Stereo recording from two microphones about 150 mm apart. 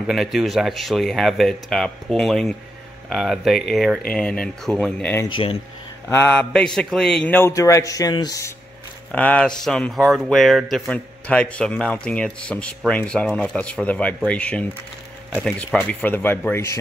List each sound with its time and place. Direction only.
0.0 s speech: centre (ahead or behind)
5.3 s speech: 35° left (ahead or behind)
6.0 s speech: 15° left (ahead or behind)
9.1 s speech: 10° left (ahead or behind)